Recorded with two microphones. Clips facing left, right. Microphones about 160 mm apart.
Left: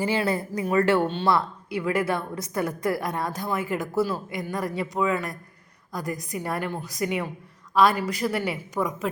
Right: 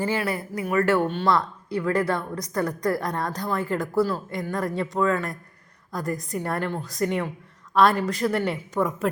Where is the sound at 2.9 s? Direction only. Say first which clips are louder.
Right 1 dB; 5° left (ahead or behind).